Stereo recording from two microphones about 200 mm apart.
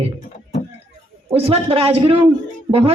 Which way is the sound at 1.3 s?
30° right (ahead or behind).